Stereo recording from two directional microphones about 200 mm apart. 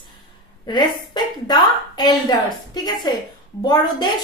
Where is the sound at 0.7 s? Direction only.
20° left (ahead or behind).